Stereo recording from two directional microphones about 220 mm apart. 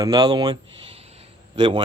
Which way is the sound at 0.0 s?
20° right (ahead or behind).